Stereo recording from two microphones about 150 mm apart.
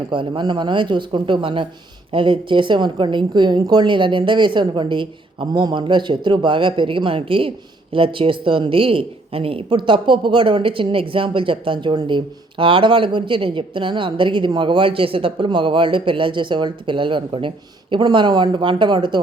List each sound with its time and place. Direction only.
0.1 s speech: 30° right (ahead or behind)